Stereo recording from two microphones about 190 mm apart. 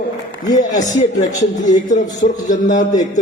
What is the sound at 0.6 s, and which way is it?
A man's voice, 40° left (ahead or behind).